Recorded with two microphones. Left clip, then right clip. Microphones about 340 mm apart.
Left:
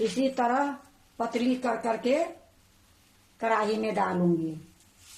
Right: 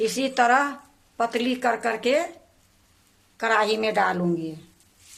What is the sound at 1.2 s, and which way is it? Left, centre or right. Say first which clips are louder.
Speech: right 4 dB; right.